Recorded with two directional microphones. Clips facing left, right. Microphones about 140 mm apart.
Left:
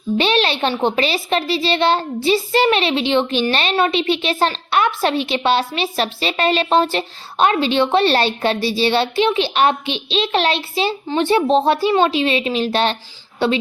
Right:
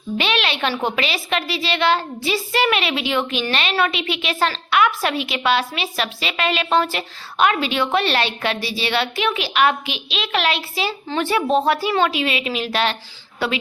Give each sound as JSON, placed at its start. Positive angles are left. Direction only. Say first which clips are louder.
{"t": 0.2, "sound": "a woman's voice", "louder": "left 4 dB", "side_deg": 35}